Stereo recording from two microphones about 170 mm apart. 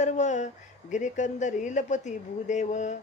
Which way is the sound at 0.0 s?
45° left (ahead or behind).